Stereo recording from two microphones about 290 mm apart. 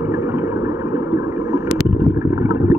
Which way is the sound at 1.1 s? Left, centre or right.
Centre.